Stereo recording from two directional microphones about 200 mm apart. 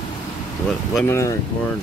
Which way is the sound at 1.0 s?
15° left (ahead or behind).